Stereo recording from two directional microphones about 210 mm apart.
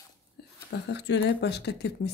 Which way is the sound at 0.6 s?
55° left (ahead or behind).